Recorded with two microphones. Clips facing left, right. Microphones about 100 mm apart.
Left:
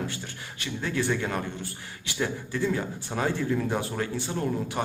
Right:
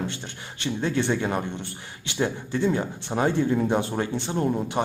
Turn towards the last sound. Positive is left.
turn(degrees=-25)  # may be behind; listen again after turning